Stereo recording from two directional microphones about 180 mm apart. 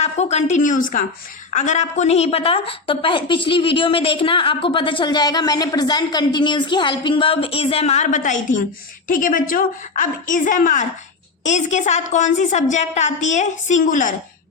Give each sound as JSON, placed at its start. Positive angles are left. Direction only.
{"t": 0.0, "sound": "a woman's voice", "side_deg": 35}